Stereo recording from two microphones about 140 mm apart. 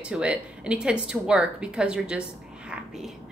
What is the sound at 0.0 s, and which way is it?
A woman's voice, 10° right (ahead or behind).